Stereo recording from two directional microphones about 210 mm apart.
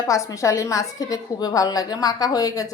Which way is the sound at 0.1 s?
15° left (ahead or behind).